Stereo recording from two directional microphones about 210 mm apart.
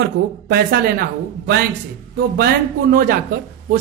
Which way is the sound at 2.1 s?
45° right (ahead or behind).